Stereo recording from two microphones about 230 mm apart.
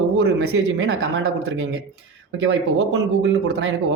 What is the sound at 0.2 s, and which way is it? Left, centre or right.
Speech, right.